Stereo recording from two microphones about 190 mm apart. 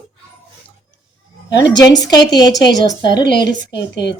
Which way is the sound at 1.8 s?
20° left (ahead or behind).